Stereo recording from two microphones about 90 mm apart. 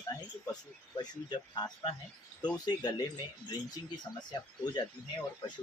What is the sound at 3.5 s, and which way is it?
Speech, 50° left (ahead or behind).